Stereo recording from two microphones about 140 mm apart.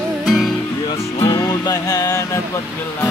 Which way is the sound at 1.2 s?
25° left (ahead or behind).